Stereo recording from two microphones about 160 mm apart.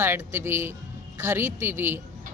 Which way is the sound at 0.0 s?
15° right (ahead or behind).